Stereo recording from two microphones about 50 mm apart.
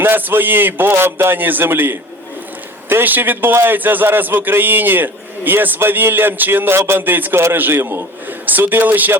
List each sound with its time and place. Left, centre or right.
0.0 s a man's voice: right
3.0 s a man's voice: right
3.5 s a man's voice: right
3.8 s a man's voice: right
7.0 s a man's voice: right
8.4 s a man's voice: right